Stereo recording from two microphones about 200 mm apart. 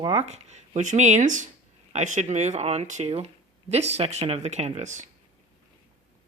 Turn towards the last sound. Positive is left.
turn(degrees=-40)  # may be behind; listen again after turning